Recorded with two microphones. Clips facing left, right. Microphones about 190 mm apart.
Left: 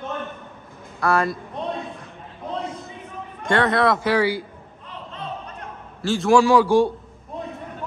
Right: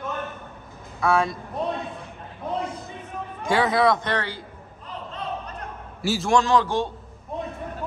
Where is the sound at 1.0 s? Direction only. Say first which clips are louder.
Left 1 dB; centre (ahead or behind).